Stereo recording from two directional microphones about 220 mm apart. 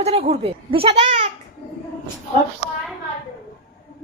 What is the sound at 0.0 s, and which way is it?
Speech, 30° right (ahead or behind).